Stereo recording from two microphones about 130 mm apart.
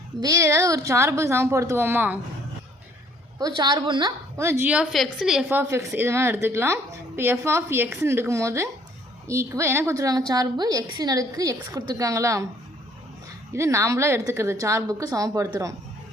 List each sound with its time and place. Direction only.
0.2 s a woman's voice: 25° right (ahead or behind)
3.3 s a woman's voice: 30° right (ahead or behind)
4.4 s a woman's voice: 20° right (ahead or behind); by 5.5 s centre (ahead or behind)
5.5 s a woman's voice: 20° right (ahead or behind)
13.5 s a woman's voice: 20° right (ahead or behind)